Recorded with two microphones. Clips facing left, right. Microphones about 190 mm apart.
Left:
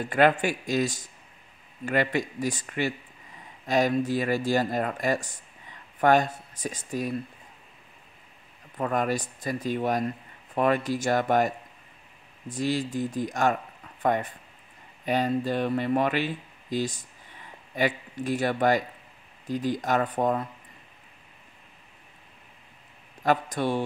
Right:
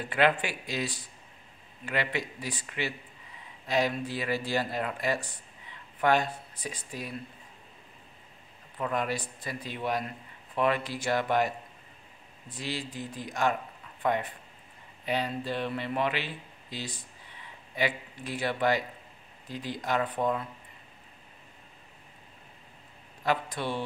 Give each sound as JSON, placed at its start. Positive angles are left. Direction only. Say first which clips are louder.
{"t": 0.1, "sound": "speech", "louder": "left 4 dB", "side_deg": 45}
{"t": 8.7, "sound": "speech", "louder": "left 4 dB", "side_deg": 45}
{"t": 23.2, "sound": "speech", "louder": "left 5 dB", "side_deg": 45}